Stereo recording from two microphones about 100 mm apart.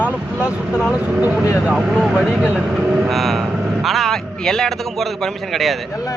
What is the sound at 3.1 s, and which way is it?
A man's voice, centre (ahead or behind).